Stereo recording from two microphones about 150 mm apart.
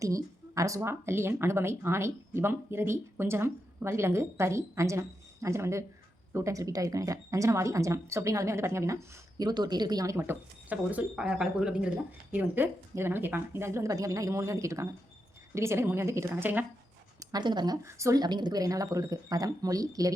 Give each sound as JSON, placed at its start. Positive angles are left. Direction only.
{"t": 0.0, "sound": "speech", "side_deg": -20}
{"t": 10.2, "sound": "speech", "side_deg": -10}
{"t": 17.2, "sound": "speech", "side_deg": -30}